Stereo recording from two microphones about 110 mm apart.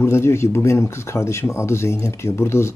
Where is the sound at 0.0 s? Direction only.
25° left (ahead or behind).